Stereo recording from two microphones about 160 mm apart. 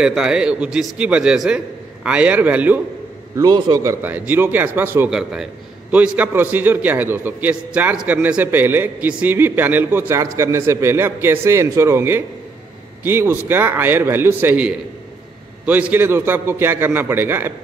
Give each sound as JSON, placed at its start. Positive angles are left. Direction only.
{"t": 0.0, "sound": "a man's voice", "side_deg": -5}
{"t": 3.3, "sound": "a man's voice", "side_deg": -25}
{"t": 4.0, "sound": "a man's voice", "side_deg": -10}